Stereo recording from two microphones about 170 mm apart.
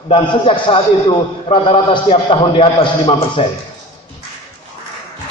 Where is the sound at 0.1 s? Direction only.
30° left (ahead or behind).